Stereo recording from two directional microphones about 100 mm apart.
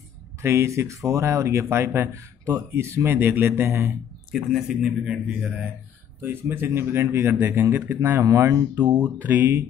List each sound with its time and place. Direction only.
0.4 s speech: 30° right (ahead or behind)
4.3 s a man's voice: 5° right (ahead or behind)